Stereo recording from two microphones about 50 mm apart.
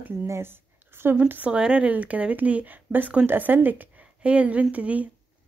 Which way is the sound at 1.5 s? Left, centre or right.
Right.